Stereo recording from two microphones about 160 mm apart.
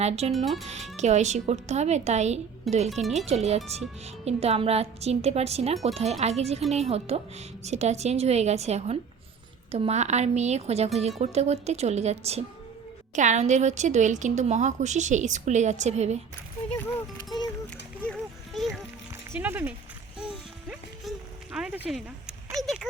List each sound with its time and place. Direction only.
0.3 s speech: centre (ahead or behind)
0.6 s speech: 45° right (ahead or behind)
2.9 s speech: centre (ahead or behind)
3.2 s speech: 40° right (ahead or behind)
18.0 s a sound: centre (ahead or behind)
19.4 s speech: 10° right (ahead or behind)
20.1 s music: 5° right (ahead or behind)
22.5 s speech: centre (ahead or behind)